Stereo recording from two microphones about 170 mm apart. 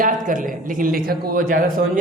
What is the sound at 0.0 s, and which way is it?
A man's voice, 50° right (ahead or behind).